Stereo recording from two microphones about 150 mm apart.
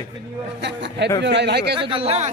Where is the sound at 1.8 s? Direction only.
35° right (ahead or behind).